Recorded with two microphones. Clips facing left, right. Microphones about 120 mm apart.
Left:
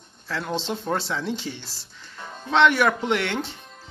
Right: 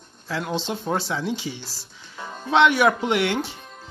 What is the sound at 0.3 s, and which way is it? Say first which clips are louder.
Speech: right 1 dB; 5° right (ahead or behind).